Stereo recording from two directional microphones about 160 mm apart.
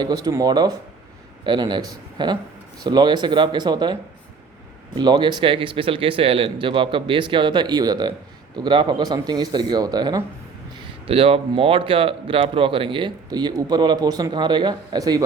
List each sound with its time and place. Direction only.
0.0 s speech: 25° right (ahead or behind)
4.9 s speech: 30° right (ahead or behind)
11.0 s speech: 35° right (ahead or behind)